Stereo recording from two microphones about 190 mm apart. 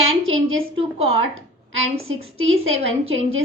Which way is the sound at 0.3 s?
90° right.